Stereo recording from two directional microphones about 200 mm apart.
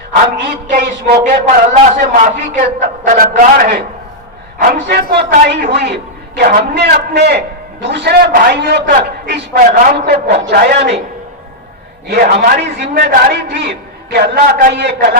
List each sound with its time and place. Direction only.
0.4 s a man's voice: 50° right (ahead or behind)
1.7 s a man's voice: 40° right (ahead or behind); by 11.0 s 60° right (ahead or behind)
12.0 s a man's voice: 50° right (ahead or behind)